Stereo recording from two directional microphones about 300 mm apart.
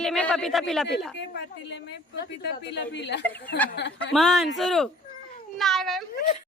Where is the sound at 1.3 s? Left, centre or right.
Left.